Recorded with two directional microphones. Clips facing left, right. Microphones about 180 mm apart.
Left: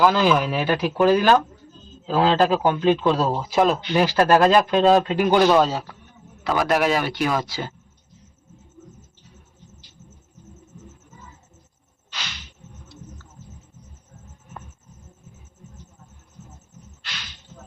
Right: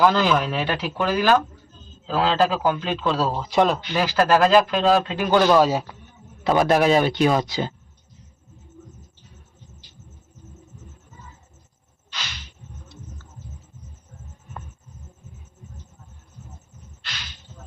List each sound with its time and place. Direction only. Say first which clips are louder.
0.0 s speech: left 1 dB; 10° left (ahead or behind)
3.8 s speech: left 2 dB; 20° left (ahead or behind)
5.5 s a man's voice: right 1 dB; 10° right (ahead or behind)
6.4 s speech: right 3 dB; 25° right (ahead or behind)